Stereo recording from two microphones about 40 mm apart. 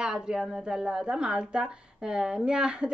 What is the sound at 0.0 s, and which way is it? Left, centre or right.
A woman's voice, centre.